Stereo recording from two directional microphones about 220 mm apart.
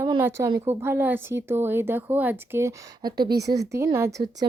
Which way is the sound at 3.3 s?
45° right (ahead or behind).